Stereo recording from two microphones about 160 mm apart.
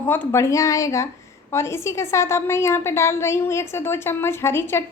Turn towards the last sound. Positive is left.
turn(degrees=15)  # may be behind; listen again after turning